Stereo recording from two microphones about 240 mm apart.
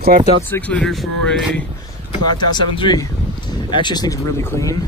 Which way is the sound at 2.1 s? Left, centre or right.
Centre.